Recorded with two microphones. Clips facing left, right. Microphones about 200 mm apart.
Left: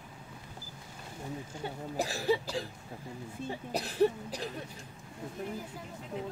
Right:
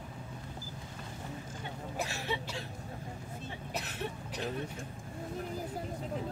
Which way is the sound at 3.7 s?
35° left (ahead or behind).